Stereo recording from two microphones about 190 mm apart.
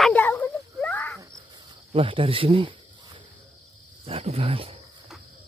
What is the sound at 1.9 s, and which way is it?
Speech, 30° right (ahead or behind).